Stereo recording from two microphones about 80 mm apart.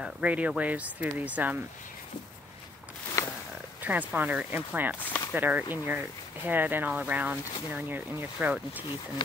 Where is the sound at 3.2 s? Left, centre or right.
Left.